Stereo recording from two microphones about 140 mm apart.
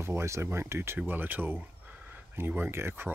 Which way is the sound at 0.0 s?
20° right (ahead or behind).